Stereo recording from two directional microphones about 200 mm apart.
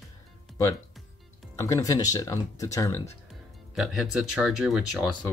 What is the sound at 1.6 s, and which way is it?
Speech, 15° left (ahead or behind).